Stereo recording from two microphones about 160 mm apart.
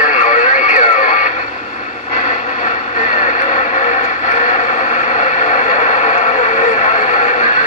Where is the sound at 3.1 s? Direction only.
50° left (ahead or behind).